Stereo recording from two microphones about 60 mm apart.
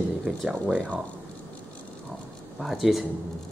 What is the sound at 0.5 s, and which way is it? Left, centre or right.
Speech, right.